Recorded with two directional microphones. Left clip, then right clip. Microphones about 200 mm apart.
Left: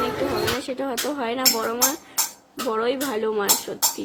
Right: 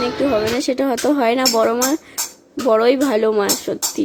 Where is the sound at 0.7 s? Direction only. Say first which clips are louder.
Right 9 dB; 35° right (ahead or behind).